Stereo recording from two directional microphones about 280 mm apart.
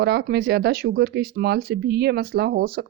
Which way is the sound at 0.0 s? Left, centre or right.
Right.